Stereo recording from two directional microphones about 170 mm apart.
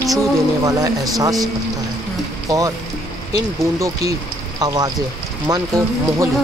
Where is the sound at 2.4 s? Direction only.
20° right (ahead or behind).